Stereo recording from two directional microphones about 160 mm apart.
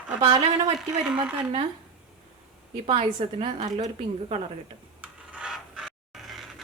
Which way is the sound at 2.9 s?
35° right (ahead or behind).